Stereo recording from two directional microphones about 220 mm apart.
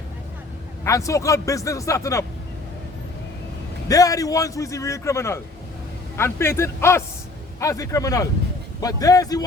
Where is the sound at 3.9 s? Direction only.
15° left (ahead or behind).